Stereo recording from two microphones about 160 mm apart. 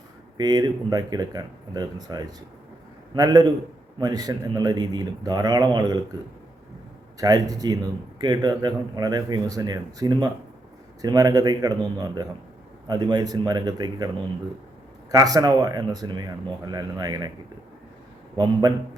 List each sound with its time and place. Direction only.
0.3 s a man's voice: 25° right (ahead or behind)
7.2 s a man's voice: 25° right (ahead or behind)
15.1 s a man's voice: 25° right (ahead or behind)
18.4 s a man's voice: 25° right (ahead or behind)